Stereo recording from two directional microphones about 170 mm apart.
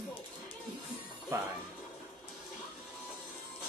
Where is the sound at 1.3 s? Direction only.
15° right (ahead or behind).